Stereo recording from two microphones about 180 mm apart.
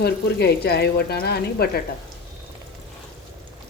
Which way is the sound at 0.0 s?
65° left (ahead or behind).